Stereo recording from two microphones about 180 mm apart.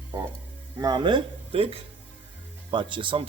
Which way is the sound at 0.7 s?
25° right (ahead or behind).